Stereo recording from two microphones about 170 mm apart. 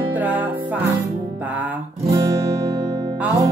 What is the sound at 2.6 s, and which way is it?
Music, 20° right (ahead or behind).